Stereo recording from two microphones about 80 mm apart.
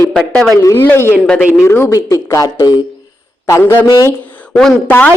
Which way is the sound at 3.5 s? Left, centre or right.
Left.